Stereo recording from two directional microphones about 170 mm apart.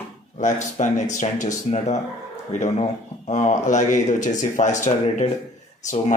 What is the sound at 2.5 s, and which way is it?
Speech, 45° left (ahead or behind).